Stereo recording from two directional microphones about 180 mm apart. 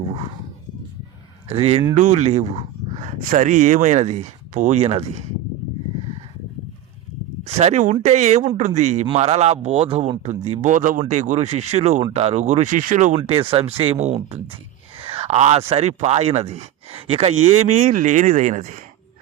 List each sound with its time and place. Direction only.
1.5 s speech: 35° right (ahead or behind)
2.0 s speech: 40° right (ahead or behind)
3.2 s speech: 45° right (ahead or behind)
7.4 s speech: 40° right (ahead or behind)
13.1 s speech: 30° right (ahead or behind)